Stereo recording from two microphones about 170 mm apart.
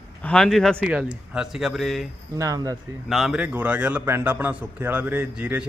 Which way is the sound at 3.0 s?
Centre (ahead or behind).